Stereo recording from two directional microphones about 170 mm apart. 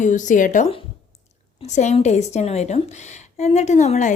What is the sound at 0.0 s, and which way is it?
A woman's voice, 45° left (ahead or behind).